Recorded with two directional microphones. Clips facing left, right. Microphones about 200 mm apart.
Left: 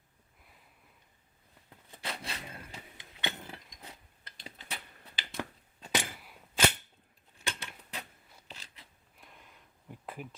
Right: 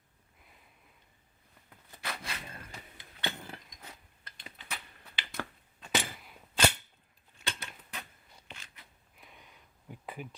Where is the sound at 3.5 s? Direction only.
25° left (ahead or behind).